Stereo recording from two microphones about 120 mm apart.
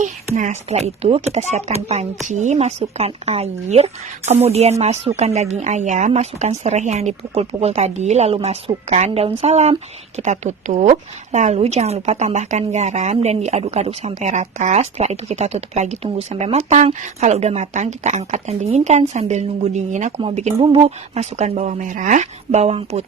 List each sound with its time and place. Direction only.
0.0 s speech: 90° right; by 2.0 s 65° right (ahead or behind)
2.2 s a woman's voice: 80° right; by 23.0 s 65° right (ahead or behind)